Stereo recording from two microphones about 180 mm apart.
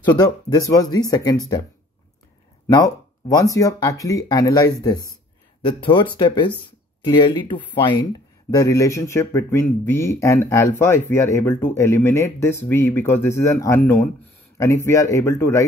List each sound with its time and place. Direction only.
0.0 s speech: 20° left (ahead or behind)
2.7 s speech: 20° left (ahead or behind)
6.1 s speech: 25° left (ahead or behind)